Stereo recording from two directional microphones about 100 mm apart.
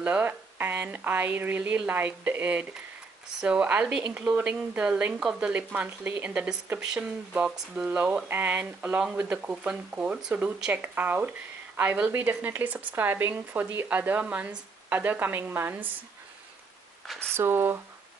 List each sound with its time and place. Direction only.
0.0 s a woman's voice: 15° right (ahead or behind)
17.3 s a woman's voice: 25° right (ahead or behind)